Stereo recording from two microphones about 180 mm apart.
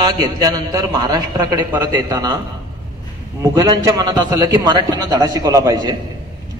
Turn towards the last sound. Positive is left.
turn(degrees=-20)  # may be behind; listen again after turning